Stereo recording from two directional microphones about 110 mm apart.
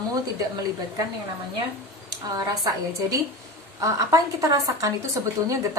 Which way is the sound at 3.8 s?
30° right (ahead or behind).